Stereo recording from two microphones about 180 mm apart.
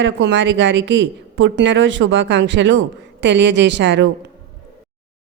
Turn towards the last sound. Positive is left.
turn(degrees=-80)